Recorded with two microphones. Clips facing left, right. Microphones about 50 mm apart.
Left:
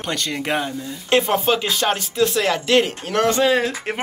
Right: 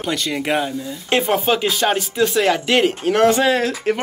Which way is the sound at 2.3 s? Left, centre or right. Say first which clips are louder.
Right 2 dB; right.